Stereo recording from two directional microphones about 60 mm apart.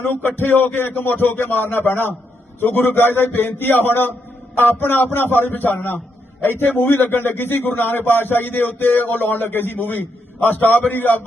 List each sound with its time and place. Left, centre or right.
0.0 s a man's voice: left